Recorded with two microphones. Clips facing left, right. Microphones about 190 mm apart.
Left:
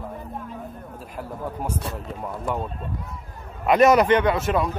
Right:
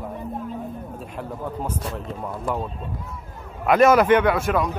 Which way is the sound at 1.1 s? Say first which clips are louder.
Even; 10° left (ahead or behind).